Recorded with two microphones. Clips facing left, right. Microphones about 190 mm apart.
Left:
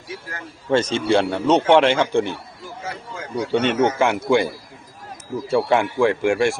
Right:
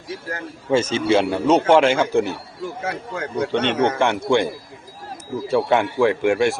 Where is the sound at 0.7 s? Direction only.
5° right (ahead or behind).